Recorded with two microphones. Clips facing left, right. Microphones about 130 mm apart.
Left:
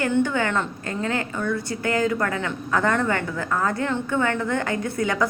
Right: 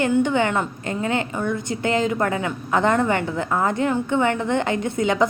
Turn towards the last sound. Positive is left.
turn(degrees=-20)  # may be behind; listen again after turning